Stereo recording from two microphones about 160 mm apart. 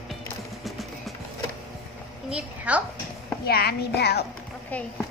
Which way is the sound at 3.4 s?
85° left.